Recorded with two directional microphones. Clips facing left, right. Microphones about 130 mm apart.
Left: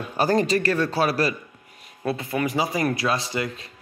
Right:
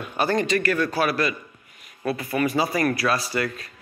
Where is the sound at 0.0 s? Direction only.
35° left (ahead or behind).